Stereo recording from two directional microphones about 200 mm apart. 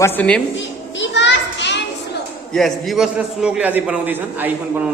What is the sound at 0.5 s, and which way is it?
Children playing, 65° left (ahead or behind).